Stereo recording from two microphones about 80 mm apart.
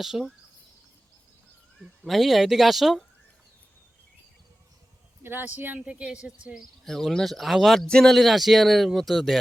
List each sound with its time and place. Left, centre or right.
0.0 s speech: centre
2.0 s speech: centre
5.2 s speech: right
5.8 s speech: centre
6.8 s speech: centre